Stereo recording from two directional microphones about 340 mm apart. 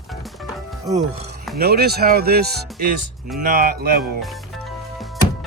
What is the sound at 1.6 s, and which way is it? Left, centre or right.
Speech, right.